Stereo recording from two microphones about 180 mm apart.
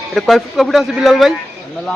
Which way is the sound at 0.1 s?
Centre (ahead or behind).